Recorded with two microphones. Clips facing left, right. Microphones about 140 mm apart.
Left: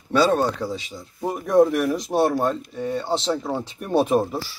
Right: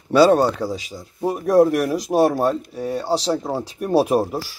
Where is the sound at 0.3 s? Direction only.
35° right (ahead or behind).